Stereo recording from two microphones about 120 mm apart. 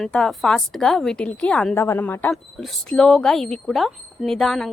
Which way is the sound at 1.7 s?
20° left (ahead or behind).